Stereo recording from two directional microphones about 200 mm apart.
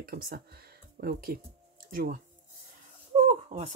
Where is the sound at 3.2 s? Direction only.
30° right (ahead or behind).